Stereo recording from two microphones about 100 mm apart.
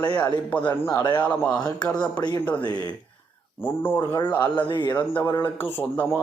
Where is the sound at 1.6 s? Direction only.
40° left (ahead or behind).